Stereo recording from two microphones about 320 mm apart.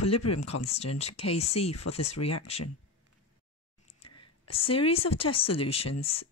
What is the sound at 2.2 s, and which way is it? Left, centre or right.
Speech, left.